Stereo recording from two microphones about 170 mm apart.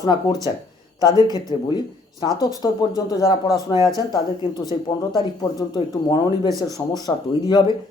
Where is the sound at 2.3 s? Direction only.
20° right (ahead or behind).